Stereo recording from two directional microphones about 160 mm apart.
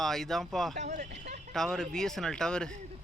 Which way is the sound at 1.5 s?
5° left (ahead or behind).